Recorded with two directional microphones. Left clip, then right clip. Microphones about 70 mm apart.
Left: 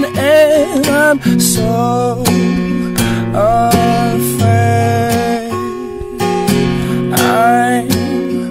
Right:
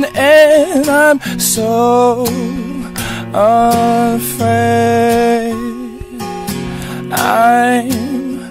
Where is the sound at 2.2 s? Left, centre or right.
Left.